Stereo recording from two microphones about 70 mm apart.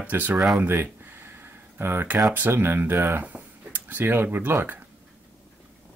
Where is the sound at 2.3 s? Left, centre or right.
Right.